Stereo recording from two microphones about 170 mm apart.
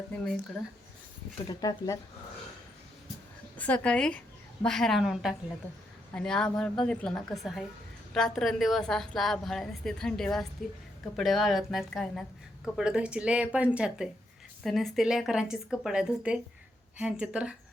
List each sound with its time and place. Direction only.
1.5 s speech: 25° left (ahead or behind)
3.6 s a woman's voice: 5° left (ahead or behind)